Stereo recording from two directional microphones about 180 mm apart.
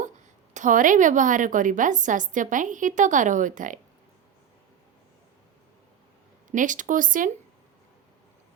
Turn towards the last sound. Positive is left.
turn(degrees=-50)  # may be behind; listen again after turning